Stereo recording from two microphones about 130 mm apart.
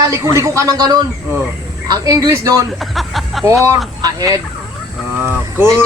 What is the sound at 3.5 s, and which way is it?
Speech, 25° right (ahead or behind).